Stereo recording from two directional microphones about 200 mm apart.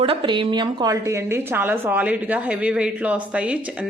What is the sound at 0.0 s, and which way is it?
A woman's voice, 25° right (ahead or behind).